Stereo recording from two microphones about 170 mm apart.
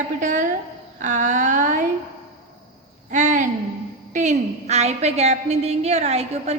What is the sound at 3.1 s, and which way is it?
A woman's voice, 45° right (ahead or behind).